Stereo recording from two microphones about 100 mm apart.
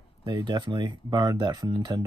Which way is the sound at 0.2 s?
45° right (ahead or behind).